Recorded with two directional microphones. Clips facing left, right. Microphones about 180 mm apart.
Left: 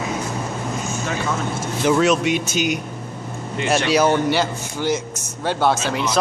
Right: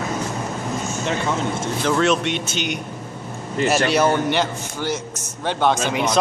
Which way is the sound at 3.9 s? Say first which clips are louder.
Left 1 dB; 5° left (ahead or behind).